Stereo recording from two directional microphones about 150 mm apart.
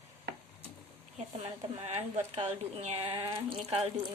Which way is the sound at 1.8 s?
45° right (ahead or behind).